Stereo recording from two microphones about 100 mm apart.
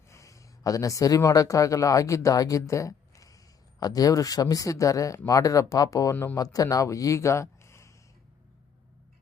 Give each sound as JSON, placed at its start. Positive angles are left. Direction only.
{"t": 0.1, "sound": "speech", "side_deg": 30}